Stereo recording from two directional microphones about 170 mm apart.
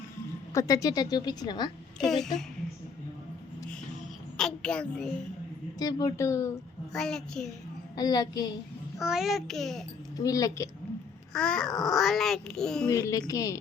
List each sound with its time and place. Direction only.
0.5 s a woman's voice: 20° left (ahead or behind)
2.0 s a child's voice: centre (ahead or behind)
4.4 s a child's voice: 5° left (ahead or behind)
5.8 s a woman's voice: 20° left (ahead or behind)
6.9 s a child's voice: 5° left (ahead or behind)
7.9 s a woman's voice: 20° left (ahead or behind)
9.0 s a child's voice: centre (ahead or behind)
10.2 s a woman's voice: 20° left (ahead or behind)
11.3 s a child's voice: 5° left (ahead or behind)
12.9 s a woman's voice: 20° left (ahead or behind)